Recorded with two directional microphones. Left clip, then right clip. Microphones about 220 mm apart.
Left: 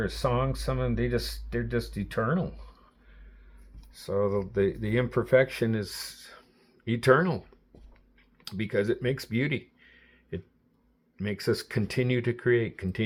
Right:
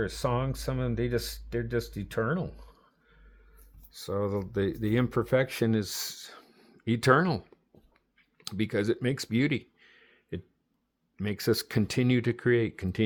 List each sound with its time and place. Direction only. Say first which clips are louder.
0.0 s speech: left 2 dB; 45° right (ahead or behind)
3.9 s speech: left 4 dB; 50° right (ahead or behind)
8.4 s speech: left 1 dB; 55° right (ahead or behind)